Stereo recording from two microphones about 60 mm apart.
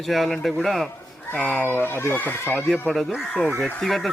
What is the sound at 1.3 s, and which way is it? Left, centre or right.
Speech, centre.